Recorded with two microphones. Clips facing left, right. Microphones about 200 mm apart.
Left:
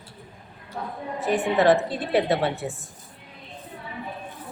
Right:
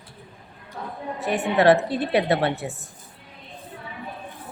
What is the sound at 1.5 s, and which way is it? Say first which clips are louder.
A woman's voice: right 3 dB; 65° right (ahead or behind).